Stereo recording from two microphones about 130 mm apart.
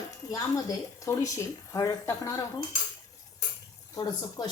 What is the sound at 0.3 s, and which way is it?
Speech, 25° left (ahead or behind).